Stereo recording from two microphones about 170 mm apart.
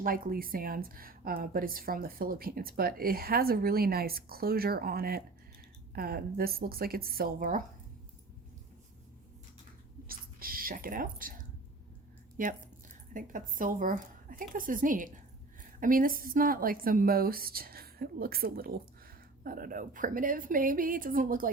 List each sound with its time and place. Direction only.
0.0 s a woman's voice: 60° right (ahead or behind)
10.1 s a sound: 55° right (ahead or behind)
12.4 s a woman's voice: 55° right (ahead or behind)